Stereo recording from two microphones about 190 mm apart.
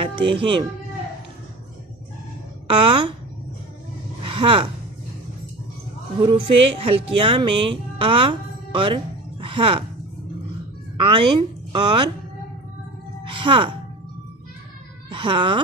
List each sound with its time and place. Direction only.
0.0 s music: 30° right (ahead or behind)
0.4 s speech: 25° right (ahead or behind)
2.7 s speech: 25° right (ahead or behind)
4.2 s a sound: 25° right (ahead or behind)
6.2 s speech: 25° right (ahead or behind)
8.0 s music: 30° right (ahead or behind)
11.0 s a woman's voice: 25° right (ahead or behind)
13.3 s speech: 25° right (ahead or behind)
15.0 s speech: 25° right (ahead or behind)